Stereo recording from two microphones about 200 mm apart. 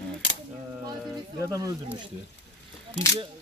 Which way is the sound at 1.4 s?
15° right (ahead or behind).